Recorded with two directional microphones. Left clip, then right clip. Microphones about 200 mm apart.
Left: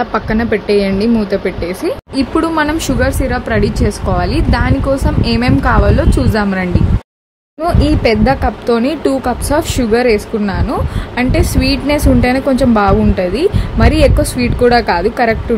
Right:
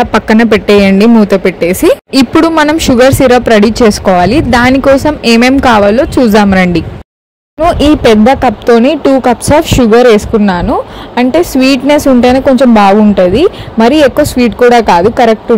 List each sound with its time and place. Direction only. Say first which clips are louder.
0.0 s speech: right 8 dB; 45° right (ahead or behind)
2.1 s speech: right 3 dB; 35° right (ahead or behind)
7.8 s a woman's voice: right 7 dB; 35° right (ahead or behind)